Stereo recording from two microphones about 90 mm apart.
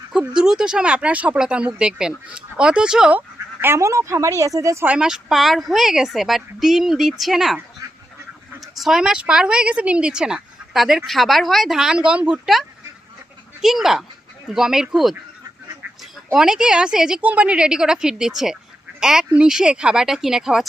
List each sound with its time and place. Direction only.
0.1 s speech: 5° right (ahead or behind)
3.2 s speech: 25° right (ahead or behind)
4.9 s a woman's voice: 10° right (ahead or behind)
8.6 s a woman's voice: 5° right (ahead or behind)
16.3 s speech: 5° right (ahead or behind)